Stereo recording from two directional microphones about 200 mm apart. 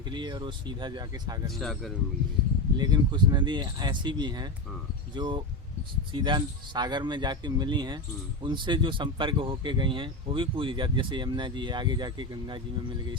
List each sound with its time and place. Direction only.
0.1 s speech: 20° right (ahead or behind)
1.5 s speech: centre (ahead or behind)
2.7 s speech: 20° right (ahead or behind)